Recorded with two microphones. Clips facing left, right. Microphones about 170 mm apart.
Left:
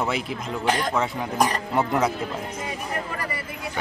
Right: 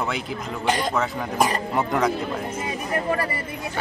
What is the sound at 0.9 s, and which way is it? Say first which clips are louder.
Speech: even; 5° right (ahead or behind).